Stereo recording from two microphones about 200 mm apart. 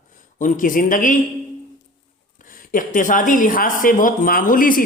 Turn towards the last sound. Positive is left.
turn(degrees=45)  # may be behind; listen again after turning